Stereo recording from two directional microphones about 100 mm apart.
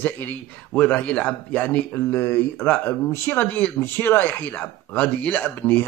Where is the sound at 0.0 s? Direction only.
20° left (ahead or behind).